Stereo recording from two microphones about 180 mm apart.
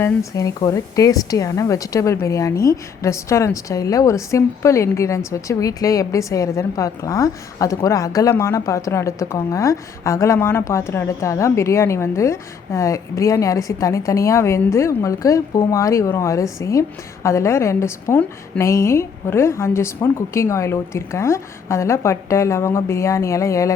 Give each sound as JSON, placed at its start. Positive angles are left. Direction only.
{"t": 0.0, "sound": "a woman's voice", "side_deg": 15}